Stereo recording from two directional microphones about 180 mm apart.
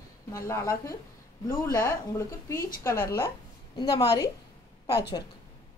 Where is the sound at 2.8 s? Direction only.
15° left (ahead or behind).